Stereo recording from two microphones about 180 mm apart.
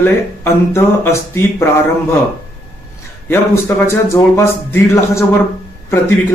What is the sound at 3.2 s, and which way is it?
Speech, 10° left (ahead or behind).